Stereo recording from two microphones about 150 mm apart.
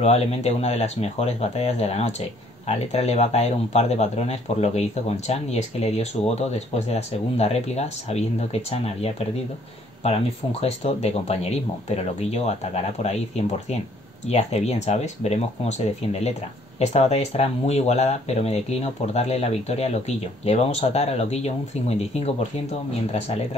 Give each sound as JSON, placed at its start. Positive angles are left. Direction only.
{"t": 0.0, "sound": "speech", "side_deg": 45}